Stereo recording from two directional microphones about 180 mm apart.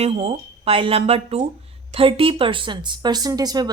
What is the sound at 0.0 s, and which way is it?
Speech, 35° right (ahead or behind).